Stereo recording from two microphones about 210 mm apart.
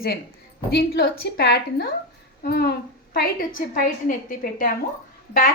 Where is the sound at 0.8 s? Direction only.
50° left (ahead or behind).